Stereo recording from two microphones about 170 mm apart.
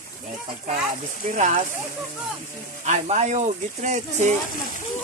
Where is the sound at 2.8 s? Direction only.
45° right (ahead or behind).